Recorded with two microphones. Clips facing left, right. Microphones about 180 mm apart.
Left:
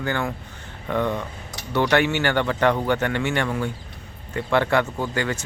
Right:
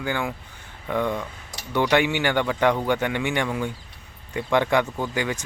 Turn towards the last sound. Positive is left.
turn(degrees=-15)  # may be behind; listen again after turning